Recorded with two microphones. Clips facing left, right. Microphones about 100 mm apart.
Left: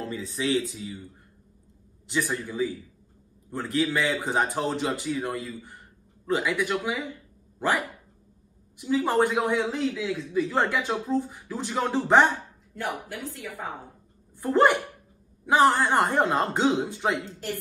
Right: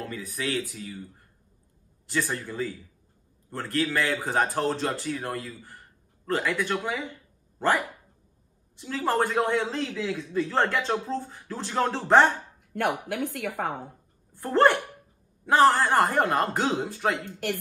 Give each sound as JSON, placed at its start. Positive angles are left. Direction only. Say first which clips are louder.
{"t": 0.0, "sound": "speech", "louder": "left 3 dB", "side_deg": 25}
{"t": 2.0, "sound": "a man's voice", "louder": "left 1 dB", "side_deg": 15}
{"t": 12.7, "sound": "speech", "louder": "right 5 dB", "side_deg": -65}
{"t": 14.3, "sound": "speech", "louder": "even", "side_deg": 15}
{"t": 17.2, "sound": "speech", "louder": "right 3 dB", "side_deg": -60}